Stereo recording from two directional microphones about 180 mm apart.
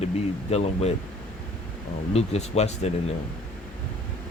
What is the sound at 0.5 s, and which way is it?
Speech, 35° left (ahead or behind).